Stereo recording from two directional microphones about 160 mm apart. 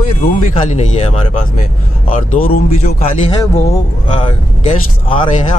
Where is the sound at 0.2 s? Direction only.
45° left (ahead or behind).